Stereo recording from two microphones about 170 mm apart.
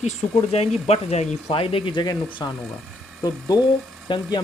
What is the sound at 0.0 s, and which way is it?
Speech, 40° left (ahead or behind).